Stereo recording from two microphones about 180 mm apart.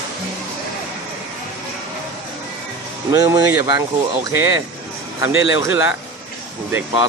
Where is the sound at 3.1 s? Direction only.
20° right (ahead or behind).